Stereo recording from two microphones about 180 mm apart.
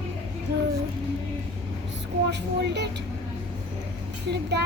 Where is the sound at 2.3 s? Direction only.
70° right (ahead or behind).